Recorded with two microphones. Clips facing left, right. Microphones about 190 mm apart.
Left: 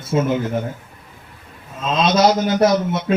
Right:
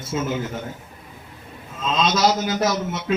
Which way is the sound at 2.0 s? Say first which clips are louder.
Left 5 dB; 55° left (ahead or behind).